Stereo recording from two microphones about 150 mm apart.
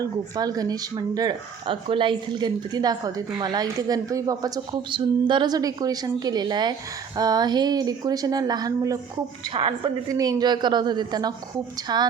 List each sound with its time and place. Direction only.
0.0 s speech: 25° right (ahead or behind)
9.5 s speech: 35° right (ahead or behind)